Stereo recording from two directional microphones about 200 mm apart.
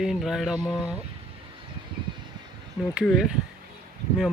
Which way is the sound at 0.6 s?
20° left (ahead or behind).